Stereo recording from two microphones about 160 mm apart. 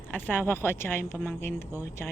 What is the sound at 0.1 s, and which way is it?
Speech, 10° left (ahead or behind).